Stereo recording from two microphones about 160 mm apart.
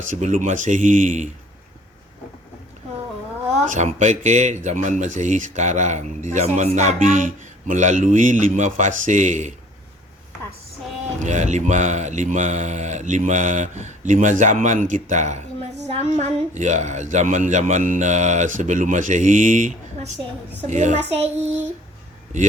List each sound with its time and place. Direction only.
0.1 s speech: 50° right (ahead or behind)
3.7 s speech: 45° right (ahead or behind)
11.2 s speech: 45° right (ahead or behind)